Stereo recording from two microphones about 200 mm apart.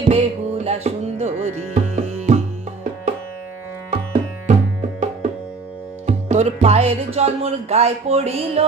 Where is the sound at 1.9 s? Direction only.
35° right (ahead or behind).